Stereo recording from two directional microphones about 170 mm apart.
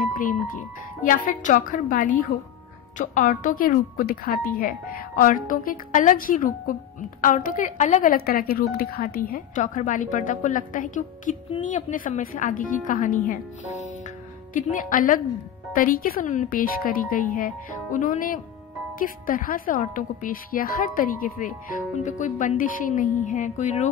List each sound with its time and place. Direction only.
0.0 s music: 50° left (ahead or behind)
1.0 s a woman's voice: 50° left (ahead or behind)